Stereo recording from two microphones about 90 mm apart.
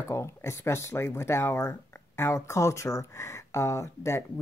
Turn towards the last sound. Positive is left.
turn(degrees=30)  # may be behind; listen again after turning